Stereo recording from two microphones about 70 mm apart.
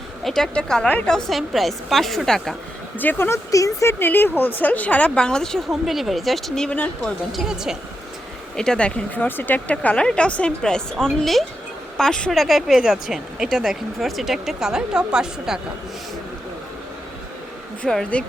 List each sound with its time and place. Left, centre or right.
0.3 s speech: centre
1.3 s speech: centre
3.0 s speech: left
3.2 s speech: left
3.8 s speech: left; by 5.5 s centre
5.8 s speech: centre
6.7 s speech: left
7.3 s speech: centre
8.5 s speech: centre
9.1 s speech: left; by 12.3 s centre
12.3 s speech: centre
17.8 s speech: centre